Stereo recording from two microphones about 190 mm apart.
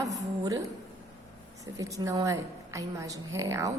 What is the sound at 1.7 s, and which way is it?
A woman's voice, 15° right (ahead or behind).